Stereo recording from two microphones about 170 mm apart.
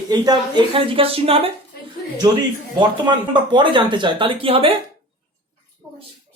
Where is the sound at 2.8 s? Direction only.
25° right (ahead or behind).